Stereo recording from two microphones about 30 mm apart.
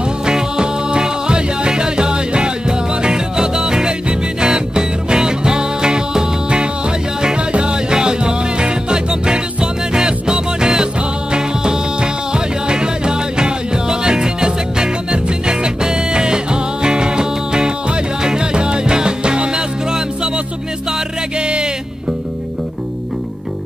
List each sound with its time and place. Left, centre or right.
0.2 s music: right
21.4 s music: right